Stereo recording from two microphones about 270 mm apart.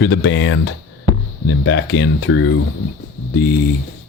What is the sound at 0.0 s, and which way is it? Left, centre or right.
Speech, left.